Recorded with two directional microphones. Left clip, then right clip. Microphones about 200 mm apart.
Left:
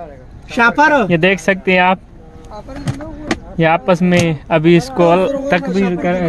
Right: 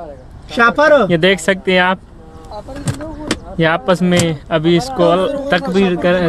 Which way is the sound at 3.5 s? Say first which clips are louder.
Left 1 dB; 10° left (ahead or behind).